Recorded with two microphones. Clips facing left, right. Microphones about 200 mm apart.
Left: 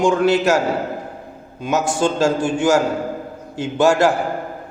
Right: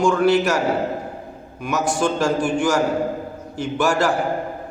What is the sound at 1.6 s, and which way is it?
A man's voice, 25° left (ahead or behind).